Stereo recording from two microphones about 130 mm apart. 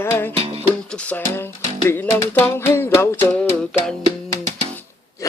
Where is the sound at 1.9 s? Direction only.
15° left (ahead or behind).